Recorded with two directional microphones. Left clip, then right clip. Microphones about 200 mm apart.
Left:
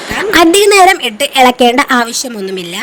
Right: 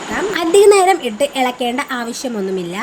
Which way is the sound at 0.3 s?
50° left (ahead or behind).